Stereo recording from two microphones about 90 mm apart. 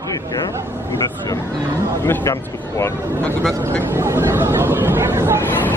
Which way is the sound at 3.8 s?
30° right (ahead or behind).